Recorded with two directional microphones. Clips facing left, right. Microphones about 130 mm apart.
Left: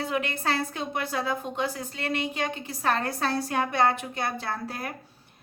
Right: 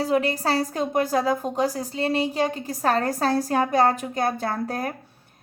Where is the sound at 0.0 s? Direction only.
35° right (ahead or behind).